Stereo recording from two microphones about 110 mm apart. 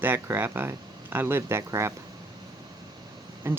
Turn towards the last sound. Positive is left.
turn(degrees=-20)  # may be behind; listen again after turning